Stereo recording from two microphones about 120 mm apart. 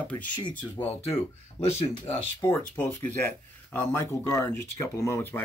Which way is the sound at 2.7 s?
15° left (ahead or behind).